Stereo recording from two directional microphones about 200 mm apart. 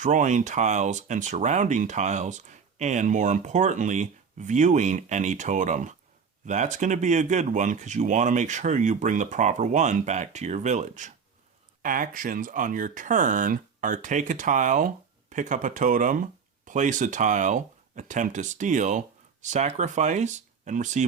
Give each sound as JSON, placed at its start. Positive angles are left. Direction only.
{"t": 0.0, "sound": "speech", "side_deg": -40}